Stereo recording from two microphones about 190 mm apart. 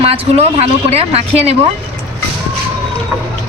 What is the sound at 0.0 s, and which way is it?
A man's voice, 30° right (ahead or behind).